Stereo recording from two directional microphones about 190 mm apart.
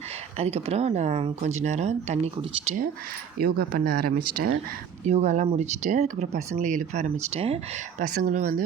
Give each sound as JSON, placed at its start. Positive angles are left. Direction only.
{"t": 0.3, "sound": "speech", "side_deg": -35}
{"t": 3.4, "sound": "speech", "side_deg": -50}
{"t": 5.0, "sound": "speech", "side_deg": -35}